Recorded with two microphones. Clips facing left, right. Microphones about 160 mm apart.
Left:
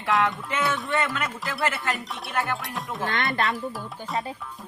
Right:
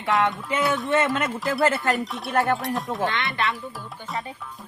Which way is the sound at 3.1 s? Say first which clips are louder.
Left 1 dB; 45° left (ahead or behind).